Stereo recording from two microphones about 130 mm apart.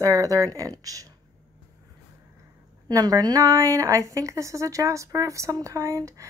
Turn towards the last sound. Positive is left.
turn(degrees=-25)  # may be behind; listen again after turning